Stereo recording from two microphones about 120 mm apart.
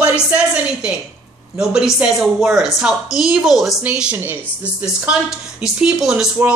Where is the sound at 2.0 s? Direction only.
5° right (ahead or behind).